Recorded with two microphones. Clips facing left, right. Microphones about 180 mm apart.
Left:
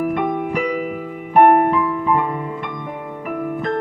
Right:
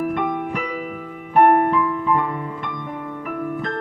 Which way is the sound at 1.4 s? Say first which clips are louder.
Left 2 dB; 15° left (ahead or behind).